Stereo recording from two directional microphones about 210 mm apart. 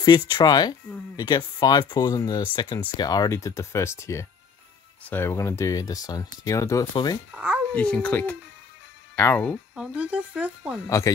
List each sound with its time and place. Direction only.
0.0 s speech: 20° left (ahead or behind)
7.3 s speech: 5° right (ahead or behind)
7.7 s speech: 5° left (ahead or behind)
9.8 s speech: 5° right (ahead or behind)